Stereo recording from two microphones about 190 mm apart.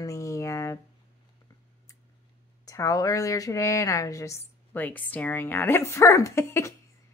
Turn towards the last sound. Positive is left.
turn(degrees=15)  # may be behind; listen again after turning